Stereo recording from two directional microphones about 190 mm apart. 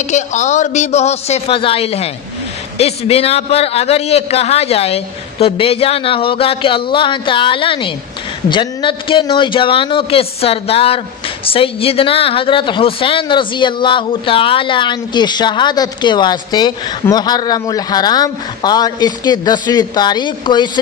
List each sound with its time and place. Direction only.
0.0 s a man's voice: 40° left (ahead or behind); by 20.7 s 25° left (ahead or behind)